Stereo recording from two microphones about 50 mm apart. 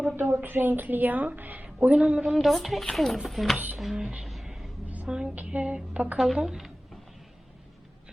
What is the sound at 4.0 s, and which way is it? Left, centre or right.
Music, right.